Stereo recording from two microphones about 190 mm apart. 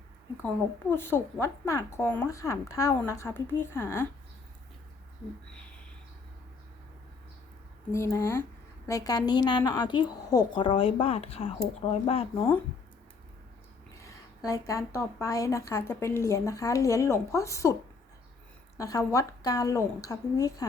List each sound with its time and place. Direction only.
0.9 s a woman's voice: 10° left (ahead or behind)
7.9 s a woman's voice: 15° left (ahead or behind); by 12.5 s 30° left (ahead or behind)
14.0 s a woman's voice: 15° left (ahead or behind)
18.8 s a woman's voice: 20° left (ahead or behind)